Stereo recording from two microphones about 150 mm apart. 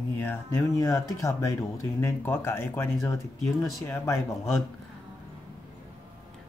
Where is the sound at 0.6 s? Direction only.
20° left (ahead or behind).